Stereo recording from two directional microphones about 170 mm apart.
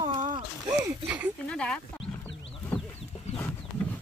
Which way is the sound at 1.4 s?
5° left (ahead or behind).